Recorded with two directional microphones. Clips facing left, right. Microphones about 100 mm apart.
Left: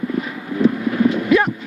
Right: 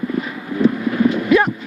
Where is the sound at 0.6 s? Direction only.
20° right (ahead or behind).